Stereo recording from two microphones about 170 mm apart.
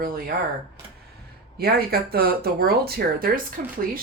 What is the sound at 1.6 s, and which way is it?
Speech, 65° right (ahead or behind).